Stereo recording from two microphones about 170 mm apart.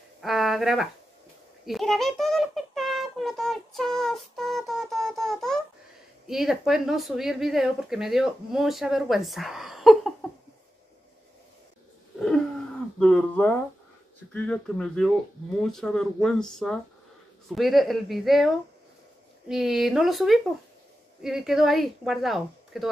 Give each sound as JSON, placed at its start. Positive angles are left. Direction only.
{"t": 0.2, "sound": "speech", "side_deg": 0}
{"t": 13.0, "sound": "speech", "side_deg": 5}